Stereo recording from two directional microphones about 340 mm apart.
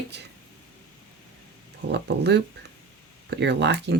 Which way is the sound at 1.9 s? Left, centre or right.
Right.